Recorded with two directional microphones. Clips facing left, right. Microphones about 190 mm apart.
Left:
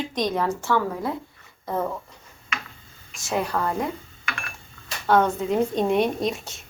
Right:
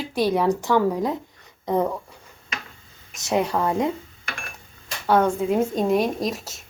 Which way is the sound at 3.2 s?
20° right (ahead or behind).